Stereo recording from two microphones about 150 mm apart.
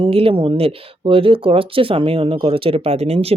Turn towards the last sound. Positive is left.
turn(degrees=-40)  # may be behind; listen again after turning